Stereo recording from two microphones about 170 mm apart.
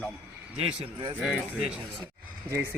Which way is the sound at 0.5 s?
30° right (ahead or behind).